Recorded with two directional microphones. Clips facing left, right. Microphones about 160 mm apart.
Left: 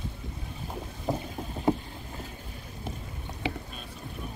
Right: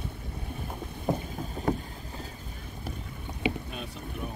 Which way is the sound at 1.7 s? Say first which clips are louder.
Left 3 dB; 10° left (ahead or behind).